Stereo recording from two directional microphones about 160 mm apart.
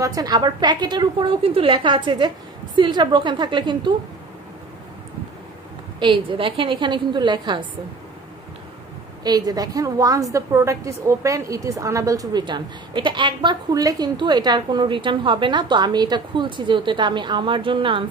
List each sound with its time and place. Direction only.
0.0 s a woman's voice: 20° right (ahead or behind)
5.9 s a woman's voice: 30° right (ahead or behind)
9.2 s a woman's voice: 25° right (ahead or behind)